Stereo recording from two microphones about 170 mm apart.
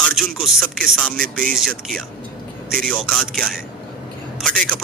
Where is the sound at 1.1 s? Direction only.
55° right (ahead or behind).